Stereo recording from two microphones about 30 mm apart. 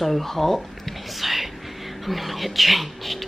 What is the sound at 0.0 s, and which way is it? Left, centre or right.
Speech, centre.